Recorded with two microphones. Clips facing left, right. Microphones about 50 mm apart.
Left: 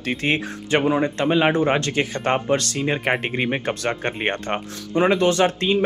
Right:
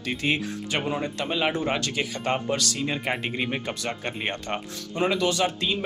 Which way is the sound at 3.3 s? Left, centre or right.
Left.